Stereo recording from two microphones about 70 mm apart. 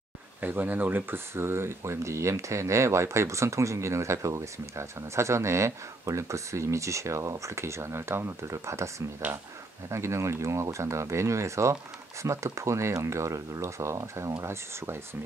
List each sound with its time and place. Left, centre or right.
0.4 s speech: right